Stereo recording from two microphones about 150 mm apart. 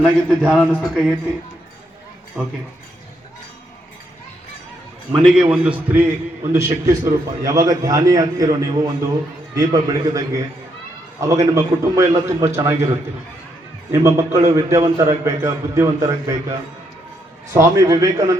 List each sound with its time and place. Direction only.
0.0 s a man's voice: 5° left (ahead or behind)
2.4 s a man's voice: 5° right (ahead or behind)
5.2 s a man's voice: 5° right (ahead or behind)